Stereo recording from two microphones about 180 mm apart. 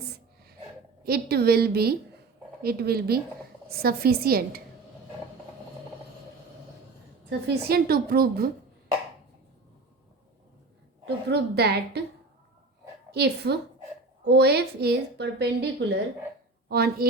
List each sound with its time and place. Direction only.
1.0 s a woman's voice: 60° right (ahead or behind)
7.3 s a woman's voice: 65° right (ahead or behind)
11.0 s a woman's voice: 65° right (ahead or behind)
13.1 s a woman's voice: 65° right (ahead or behind)